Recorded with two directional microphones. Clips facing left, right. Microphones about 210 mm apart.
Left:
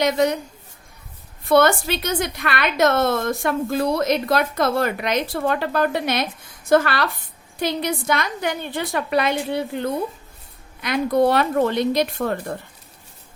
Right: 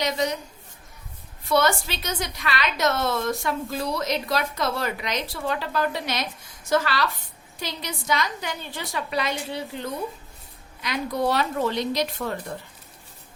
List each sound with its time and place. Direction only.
0.0 s a woman's voice: 55° left (ahead or behind)
1.5 s a woman's voice: 55° left (ahead or behind)